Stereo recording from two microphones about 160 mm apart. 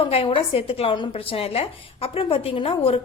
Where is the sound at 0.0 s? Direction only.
35° left (ahead or behind).